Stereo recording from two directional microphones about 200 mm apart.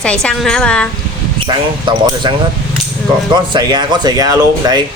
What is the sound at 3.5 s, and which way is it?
Speech, 20° right (ahead or behind).